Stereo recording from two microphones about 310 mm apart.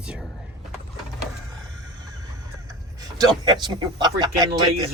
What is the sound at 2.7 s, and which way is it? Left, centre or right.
Speech, centre.